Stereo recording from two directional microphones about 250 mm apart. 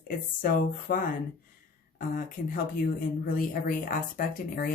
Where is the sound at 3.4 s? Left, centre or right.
Left.